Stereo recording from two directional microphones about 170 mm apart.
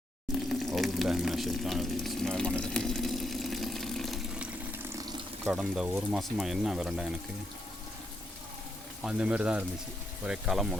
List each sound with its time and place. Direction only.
0.4 s speech: centre (ahead or behind)
4.8 s water tap: 20° right (ahead or behind)
5.5 s speech: 5° right (ahead or behind)
9.0 s speech: 5° right (ahead or behind)